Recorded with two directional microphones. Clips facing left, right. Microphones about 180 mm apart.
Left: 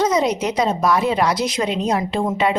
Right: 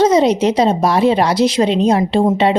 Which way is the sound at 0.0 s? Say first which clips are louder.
Right 7 dB; 30° right (ahead or behind).